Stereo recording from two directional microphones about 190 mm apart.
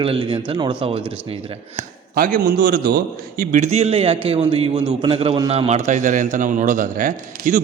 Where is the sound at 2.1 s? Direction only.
45° right (ahead or behind).